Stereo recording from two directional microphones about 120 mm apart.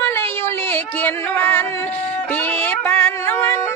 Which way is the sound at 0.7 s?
15° left (ahead or behind).